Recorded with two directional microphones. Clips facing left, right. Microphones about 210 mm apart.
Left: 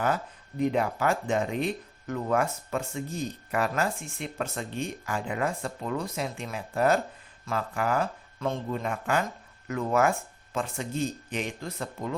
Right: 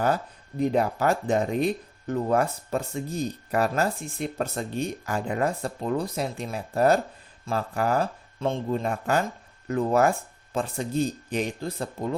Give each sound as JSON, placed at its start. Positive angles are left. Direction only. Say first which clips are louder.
{"t": 0.6, "sound": "speech", "louder": "right 3 dB", "side_deg": -35}